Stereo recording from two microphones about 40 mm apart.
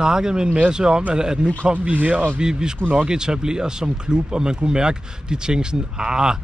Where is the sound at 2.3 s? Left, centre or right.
Centre.